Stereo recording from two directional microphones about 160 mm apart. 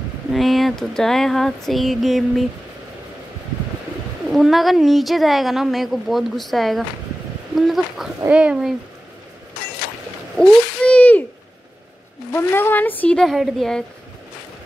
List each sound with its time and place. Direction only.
0.3 s a woman's voice: centre (ahead or behind)
4.3 s a woman's voice: centre (ahead or behind)
10.3 s a sound: 5° left (ahead or behind)
12.3 s speech: 15° left (ahead or behind)